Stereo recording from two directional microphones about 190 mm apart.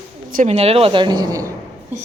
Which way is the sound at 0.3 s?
45° right (ahead or behind).